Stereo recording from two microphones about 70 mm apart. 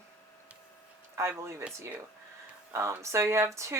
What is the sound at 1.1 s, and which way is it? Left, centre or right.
Speech, right.